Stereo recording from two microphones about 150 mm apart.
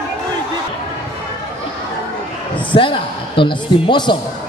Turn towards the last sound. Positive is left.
turn(degrees=30)  # may be behind; listen again after turning